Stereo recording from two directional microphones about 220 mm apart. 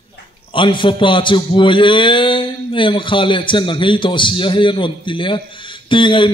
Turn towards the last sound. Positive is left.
turn(degrees=20)  # may be behind; listen again after turning